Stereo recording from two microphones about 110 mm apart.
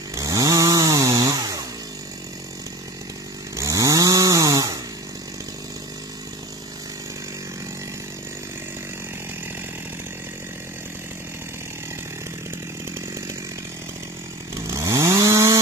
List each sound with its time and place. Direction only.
0.1 s chainsaw: 30° right (ahead or behind)
3.5 s chainsaw: 30° right (ahead or behind)
14.5 s chainsaw: 30° right (ahead or behind)